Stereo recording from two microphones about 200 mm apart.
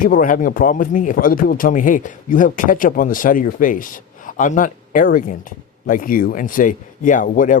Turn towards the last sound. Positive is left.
turn(degrees=40)  # may be behind; listen again after turning